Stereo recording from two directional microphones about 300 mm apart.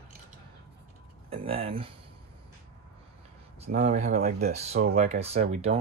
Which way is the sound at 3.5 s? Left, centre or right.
Right.